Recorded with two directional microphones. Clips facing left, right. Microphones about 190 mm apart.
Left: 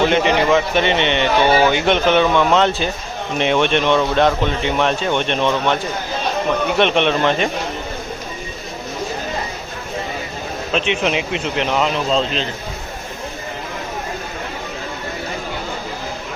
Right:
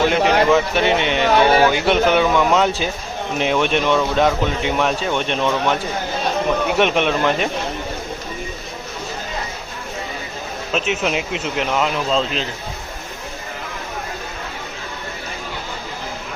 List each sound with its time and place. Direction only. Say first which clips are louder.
0.1 s speech: even; centre (ahead or behind)
10.8 s speech: left 2 dB; 5° right (ahead or behind)